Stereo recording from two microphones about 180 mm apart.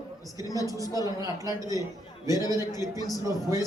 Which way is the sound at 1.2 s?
20° right (ahead or behind).